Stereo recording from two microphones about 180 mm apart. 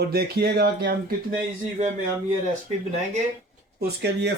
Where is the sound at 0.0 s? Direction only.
60° right (ahead or behind).